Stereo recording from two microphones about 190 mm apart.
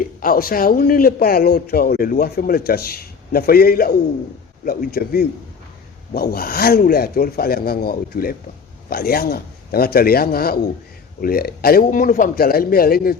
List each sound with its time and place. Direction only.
0.0 s a man's voice: 50° left (ahead or behind)